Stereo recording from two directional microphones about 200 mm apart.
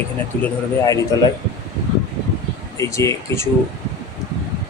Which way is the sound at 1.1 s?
20° left (ahead or behind).